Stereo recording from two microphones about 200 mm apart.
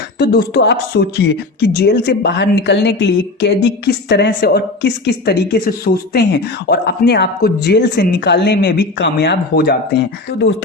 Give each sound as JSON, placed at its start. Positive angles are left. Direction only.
{"t": 0.2, "sound": "speech", "side_deg": 55}